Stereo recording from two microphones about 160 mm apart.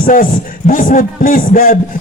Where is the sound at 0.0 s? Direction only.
60° left (ahead or behind).